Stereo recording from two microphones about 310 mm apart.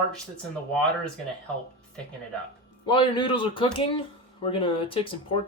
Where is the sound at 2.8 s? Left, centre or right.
Centre.